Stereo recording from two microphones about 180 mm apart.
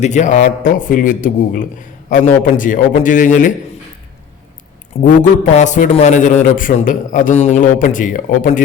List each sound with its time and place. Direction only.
0.0 s a man's voice: 40° left (ahead or behind)
5.0 s a man's voice: 45° left (ahead or behind)